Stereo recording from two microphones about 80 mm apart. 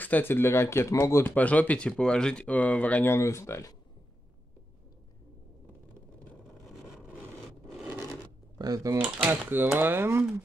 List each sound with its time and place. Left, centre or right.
0.0 s speech: left
1.2 s speech: centre
3.1 s speech: left
8.5 s speech: right
8.9 s speech: right